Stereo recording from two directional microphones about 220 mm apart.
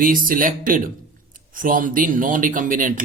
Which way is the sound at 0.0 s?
40° right (ahead or behind).